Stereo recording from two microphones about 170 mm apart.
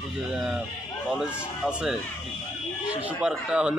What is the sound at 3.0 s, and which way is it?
Speech, 5° right (ahead or behind).